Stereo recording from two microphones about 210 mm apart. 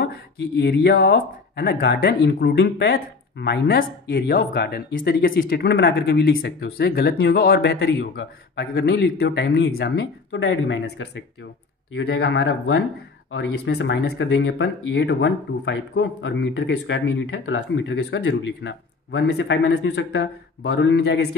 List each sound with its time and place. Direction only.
0.0 s speech: 50° left (ahead or behind); by 11.2 s 70° left (ahead or behind)
11.9 s speech: 55° left (ahead or behind)